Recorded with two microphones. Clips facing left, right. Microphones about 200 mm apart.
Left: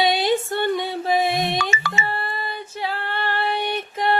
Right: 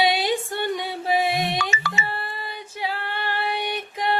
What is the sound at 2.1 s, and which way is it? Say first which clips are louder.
Female singing: left 4 dB; 10° right (ahead or behind).